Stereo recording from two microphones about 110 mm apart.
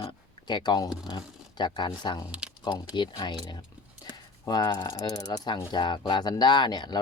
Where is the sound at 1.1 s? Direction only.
45° left (ahead or behind).